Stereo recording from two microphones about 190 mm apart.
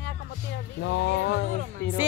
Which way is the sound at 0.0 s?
65° left (ahead or behind).